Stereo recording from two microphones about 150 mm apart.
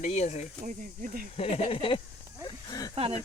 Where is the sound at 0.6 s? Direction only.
65° right (ahead or behind).